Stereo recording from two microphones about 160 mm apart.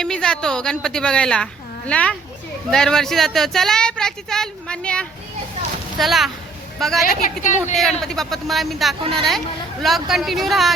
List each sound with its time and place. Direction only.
0.0 s a woman's voice: 5° left (ahead or behind)
7.0 s a woman's voice: 50° left (ahead or behind)
8.0 s speech: centre (ahead or behind)